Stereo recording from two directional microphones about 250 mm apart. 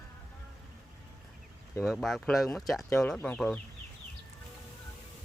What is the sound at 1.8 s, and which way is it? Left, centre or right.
Speech, centre.